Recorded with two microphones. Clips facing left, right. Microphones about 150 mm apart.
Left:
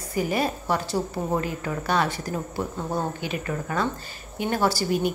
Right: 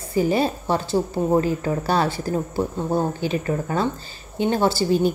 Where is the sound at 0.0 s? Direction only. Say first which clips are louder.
Right 5 dB; 30° right (ahead or behind).